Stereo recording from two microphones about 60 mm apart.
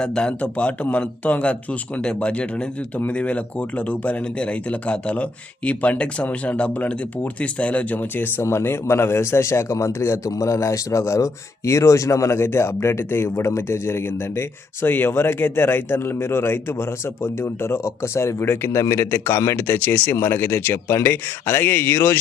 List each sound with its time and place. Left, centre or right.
0.0 s speech: centre; by 8.4 s left
8.4 s a man's voice: left
19.5 s speech: left